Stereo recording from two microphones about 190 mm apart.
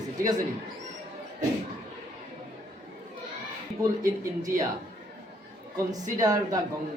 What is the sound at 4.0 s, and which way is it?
Speech, 45° right (ahead or behind).